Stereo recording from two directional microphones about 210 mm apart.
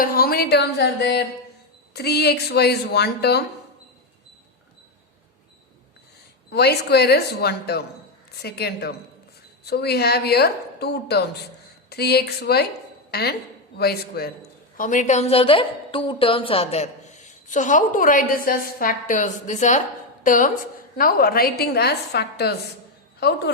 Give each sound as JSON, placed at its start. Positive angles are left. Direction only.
{"t": 0.0, "sound": "a woman's voice", "side_deg": 45}
{"t": 6.5, "sound": "a woman's voice", "side_deg": 50}
{"t": 13.1, "sound": "a sound", "side_deg": 50}
{"t": 13.7, "sound": "a woman's voice", "side_deg": 50}
{"t": 14.8, "sound": "a woman's voice", "side_deg": 35}